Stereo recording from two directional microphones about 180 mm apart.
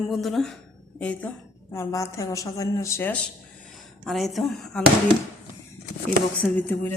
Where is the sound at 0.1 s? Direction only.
Centre (ahead or behind).